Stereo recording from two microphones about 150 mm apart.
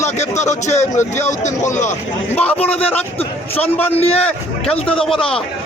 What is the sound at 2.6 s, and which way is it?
A man's voice, 40° left (ahead or behind).